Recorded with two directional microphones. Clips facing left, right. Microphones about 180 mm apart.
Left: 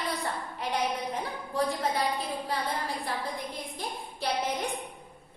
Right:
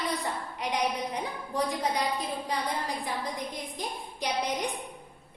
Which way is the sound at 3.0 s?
15° right (ahead or behind).